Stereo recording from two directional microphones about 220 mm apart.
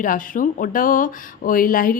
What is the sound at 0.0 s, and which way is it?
Speech, 40° left (ahead or behind).